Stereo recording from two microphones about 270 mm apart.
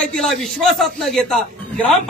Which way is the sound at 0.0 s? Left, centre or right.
Centre.